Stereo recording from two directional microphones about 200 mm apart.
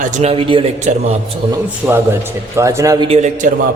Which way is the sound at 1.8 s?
5° left (ahead or behind).